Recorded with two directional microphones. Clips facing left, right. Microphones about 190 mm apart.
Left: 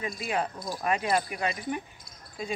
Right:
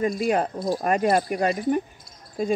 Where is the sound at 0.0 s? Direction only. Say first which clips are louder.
Right 9 dB; 45° right (ahead or behind).